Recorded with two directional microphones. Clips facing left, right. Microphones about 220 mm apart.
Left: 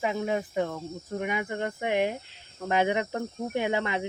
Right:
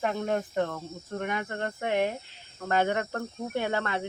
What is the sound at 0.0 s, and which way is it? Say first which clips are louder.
Speech: even; 5° left (ahead or behind).